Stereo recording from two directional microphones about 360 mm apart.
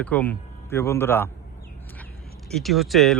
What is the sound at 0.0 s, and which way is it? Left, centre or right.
Speech, centre.